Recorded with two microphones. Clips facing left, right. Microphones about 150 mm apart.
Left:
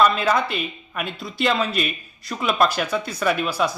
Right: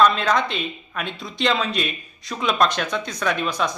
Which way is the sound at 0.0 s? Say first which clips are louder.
Even; 5° left (ahead or behind).